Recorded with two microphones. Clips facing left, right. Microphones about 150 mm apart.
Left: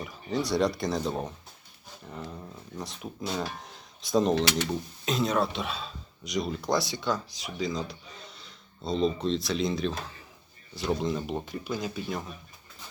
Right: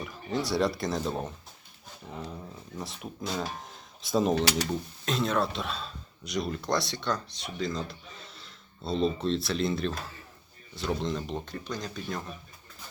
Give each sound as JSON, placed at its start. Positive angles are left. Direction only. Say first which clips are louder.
{"t": 0.0, "sound": "speech", "louder": "left 1 dB", "side_deg": 0}
{"t": 2.7, "sound": "speech", "louder": "left 1 dB", "side_deg": 0}
{"t": 4.4, "sound": "speech", "louder": "left 1 dB", "side_deg": -40}
{"t": 4.7, "sound": "speech", "louder": "left 1 dB", "side_deg": 0}